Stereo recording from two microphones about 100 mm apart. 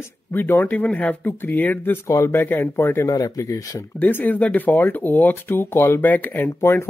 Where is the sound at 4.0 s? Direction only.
20° left (ahead or behind).